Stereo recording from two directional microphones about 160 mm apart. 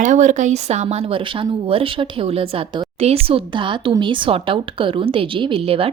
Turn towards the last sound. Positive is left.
turn(degrees=-35)  # may be behind; listen again after turning